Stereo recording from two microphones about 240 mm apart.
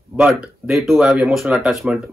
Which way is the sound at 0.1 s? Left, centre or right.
Centre.